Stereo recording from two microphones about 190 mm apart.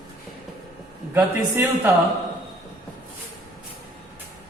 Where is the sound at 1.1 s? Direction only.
10° right (ahead or behind).